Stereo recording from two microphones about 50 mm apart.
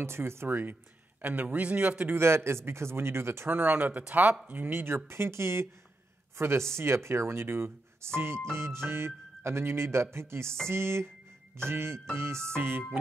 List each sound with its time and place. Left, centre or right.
0.0 s music: right
1.2 s a man's voice: right
2.0 s music: right
4.1 s a man's voice: right
4.5 s music: right